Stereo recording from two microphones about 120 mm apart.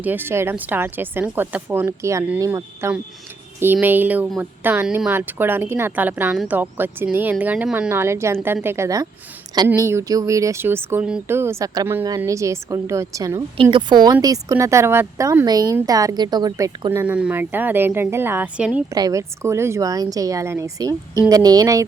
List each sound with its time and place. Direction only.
0.0 s a woman's voice: 15° right (ahead or behind)
13.6 s a woman's voice: 45° right (ahead or behind)
16.9 s speech: 20° right (ahead or behind)
18.9 s a woman's voice: 30° right (ahead or behind)